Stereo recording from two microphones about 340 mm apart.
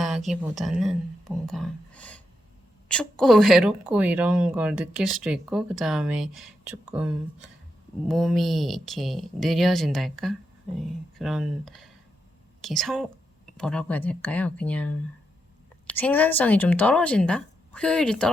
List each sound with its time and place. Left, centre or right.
0.0 s speech: centre
16.0 s speech: centre